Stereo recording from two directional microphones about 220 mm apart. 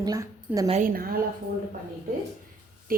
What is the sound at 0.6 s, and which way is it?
Speech, 35° right (ahead or behind).